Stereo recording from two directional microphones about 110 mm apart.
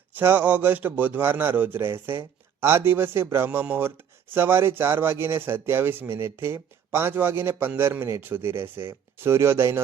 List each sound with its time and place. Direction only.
0.1 s a man's voice: 20° right (ahead or behind)